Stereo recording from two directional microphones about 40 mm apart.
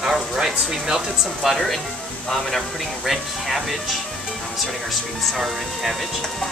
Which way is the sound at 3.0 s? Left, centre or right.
Centre.